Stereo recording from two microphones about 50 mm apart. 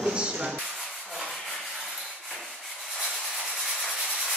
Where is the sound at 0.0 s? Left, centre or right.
Centre.